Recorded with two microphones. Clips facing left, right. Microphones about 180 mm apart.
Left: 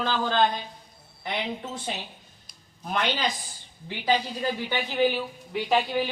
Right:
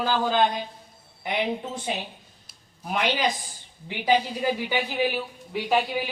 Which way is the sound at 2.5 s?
10° right (ahead or behind).